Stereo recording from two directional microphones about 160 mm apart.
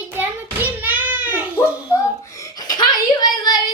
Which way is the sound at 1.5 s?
15° left (ahead or behind).